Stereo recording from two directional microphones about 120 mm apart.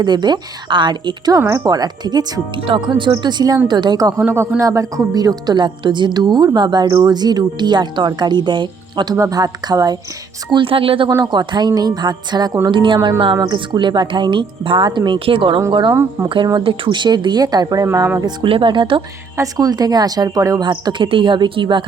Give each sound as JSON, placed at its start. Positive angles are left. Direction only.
{"t": 0.0, "sound": "a woman's voice", "side_deg": -35}
{"t": 1.4, "sound": "a woman's voice", "side_deg": -25}
{"t": 2.6, "sound": "a woman's voice", "side_deg": -45}
{"t": 4.3, "sound": "a woman's voice", "side_deg": -20}
{"t": 9.1, "sound": "a woman's voice", "side_deg": -30}
{"t": 10.5, "sound": "speech", "side_deg": -45}
{"t": 11.1, "sound": "a woman's voice", "side_deg": -35}
{"t": 15.9, "sound": "speech", "side_deg": -20}
{"t": 16.6, "sound": "a woman's voice", "side_deg": -45}
{"t": 17.8, "sound": "speech", "side_deg": -25}
{"t": 18.4, "sound": "speech", "side_deg": -45}
{"t": 19.4, "sound": "a woman's voice", "side_deg": -30}